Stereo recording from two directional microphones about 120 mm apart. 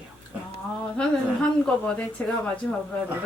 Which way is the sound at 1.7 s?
10° left (ahead or behind).